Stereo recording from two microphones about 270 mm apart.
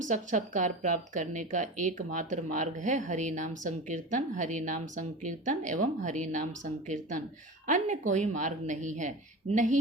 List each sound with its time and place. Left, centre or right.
0.0 s a woman's voice: right